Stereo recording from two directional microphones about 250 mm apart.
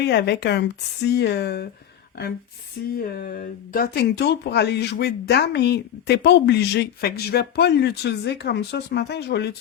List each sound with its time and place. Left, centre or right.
0.0 s speech: left
3.0 s speech: left